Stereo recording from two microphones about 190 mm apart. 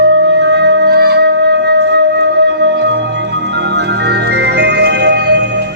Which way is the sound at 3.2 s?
65° right (ahead or behind).